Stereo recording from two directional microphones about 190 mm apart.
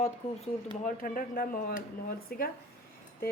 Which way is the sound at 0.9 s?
45° left (ahead or behind).